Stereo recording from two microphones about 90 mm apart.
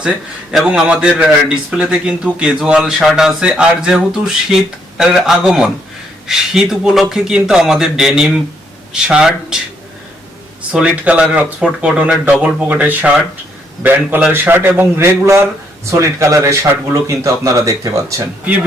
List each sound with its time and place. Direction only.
0.5 s a man's voice: 5° right (ahead or behind)
10.7 s a man's voice: 15° right (ahead or behind); by 18.3 s 35° right (ahead or behind)